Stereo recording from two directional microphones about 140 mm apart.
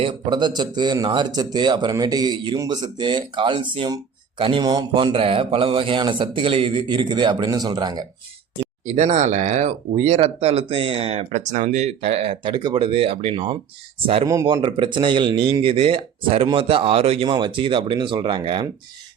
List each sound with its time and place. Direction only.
0.0 s speech: 30° right (ahead or behind)
8.9 s speech: 55° right (ahead or behind)
17.2 s speech: 30° right (ahead or behind)